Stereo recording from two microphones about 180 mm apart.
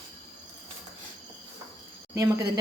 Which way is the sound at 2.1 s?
15° right (ahead or behind).